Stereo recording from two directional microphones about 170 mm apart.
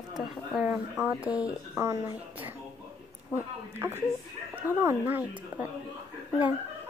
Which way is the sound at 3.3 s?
15° right (ahead or behind).